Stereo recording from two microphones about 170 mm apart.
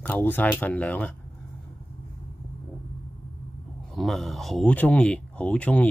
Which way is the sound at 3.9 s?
Centre (ahead or behind).